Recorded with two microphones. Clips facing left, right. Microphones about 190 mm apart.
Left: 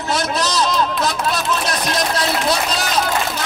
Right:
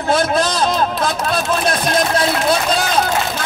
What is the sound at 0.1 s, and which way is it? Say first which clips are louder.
A man's voice: right 5 dB; 55° right (ahead or behind).